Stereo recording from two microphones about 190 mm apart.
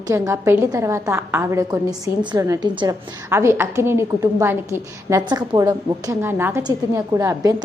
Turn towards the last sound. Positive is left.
turn(degrees=-20)  # may be behind; listen again after turning